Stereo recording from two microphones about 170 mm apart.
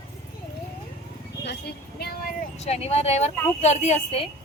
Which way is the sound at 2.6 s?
35° left (ahead or behind).